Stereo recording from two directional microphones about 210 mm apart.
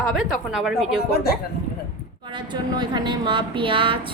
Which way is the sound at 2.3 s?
20° right (ahead or behind).